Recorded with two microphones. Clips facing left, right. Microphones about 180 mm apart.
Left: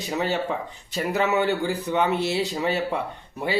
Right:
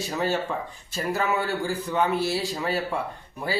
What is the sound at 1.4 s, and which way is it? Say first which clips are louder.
A man's voice: left 4 dB; 20° left (ahead or behind).